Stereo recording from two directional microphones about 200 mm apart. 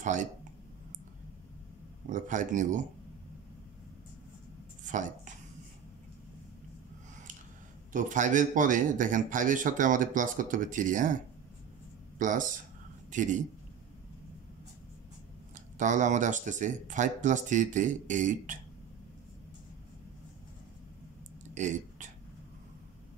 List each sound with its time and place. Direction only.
0.0 s speech: 40° right (ahead or behind)
2.0 s speech: 40° right (ahead or behind)
4.8 s speech: 40° right (ahead or behind)
7.9 s speech: 40° right (ahead or behind)
12.2 s speech: 40° right (ahead or behind)
15.5 s speech: 40° right (ahead or behind)
21.5 s speech: 35° right (ahead or behind)